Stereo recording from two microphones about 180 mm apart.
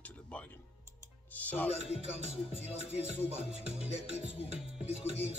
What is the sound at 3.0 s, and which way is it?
Music, 35° right (ahead or behind).